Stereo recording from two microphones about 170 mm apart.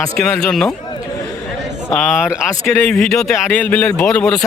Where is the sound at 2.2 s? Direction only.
15° left (ahead or behind).